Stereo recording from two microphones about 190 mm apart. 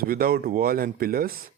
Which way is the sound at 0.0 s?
50° right (ahead or behind).